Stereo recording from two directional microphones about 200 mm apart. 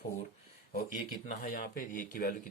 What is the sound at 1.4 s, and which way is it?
Speech, 45° left (ahead or behind).